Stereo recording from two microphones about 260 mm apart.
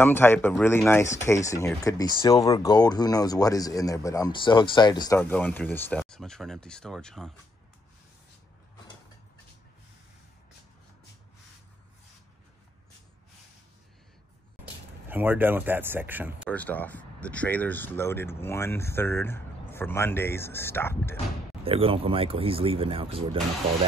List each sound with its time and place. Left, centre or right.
0.0 s speech: centre
14.6 s speech: centre
16.4 s speech: centre
21.6 s speech: right